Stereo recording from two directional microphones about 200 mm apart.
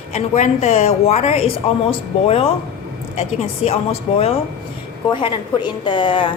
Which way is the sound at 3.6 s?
5° right (ahead or behind).